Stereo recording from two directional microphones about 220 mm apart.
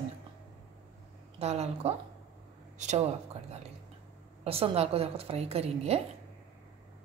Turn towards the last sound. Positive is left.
turn(degrees=-25)  # may be behind; listen again after turning